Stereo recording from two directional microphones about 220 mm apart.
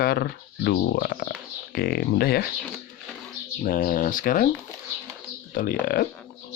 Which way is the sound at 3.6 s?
40° left (ahead or behind).